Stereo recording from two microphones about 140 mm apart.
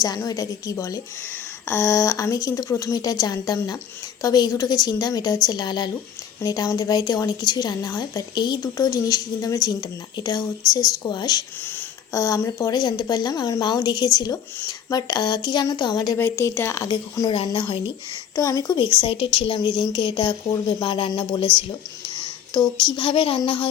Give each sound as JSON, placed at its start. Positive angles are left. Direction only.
{"t": 0.0, "sound": "a woman's voice", "side_deg": 25}
{"t": 11.6, "sound": "a sound", "side_deg": 15}
{"t": 12.1, "sound": "a woman's voice", "side_deg": 25}
{"t": 16.1, "sound": "a woman's voice", "side_deg": 15}
{"t": 16.9, "sound": "speech", "side_deg": 35}
{"t": 18.3, "sound": "a woman's voice", "side_deg": 25}
{"t": 18.8, "sound": "speech", "side_deg": 35}
{"t": 22.9, "sound": "speech", "side_deg": 40}